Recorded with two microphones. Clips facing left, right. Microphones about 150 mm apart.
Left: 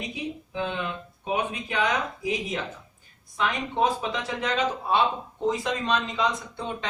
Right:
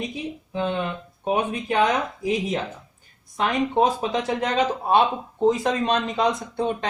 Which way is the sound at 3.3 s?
40° right (ahead or behind).